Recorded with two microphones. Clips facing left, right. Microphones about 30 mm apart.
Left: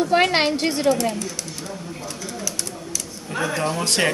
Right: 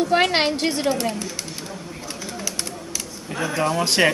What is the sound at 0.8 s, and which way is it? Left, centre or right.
Speech, centre.